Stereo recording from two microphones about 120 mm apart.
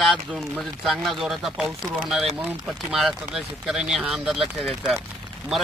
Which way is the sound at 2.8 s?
5° right (ahead or behind).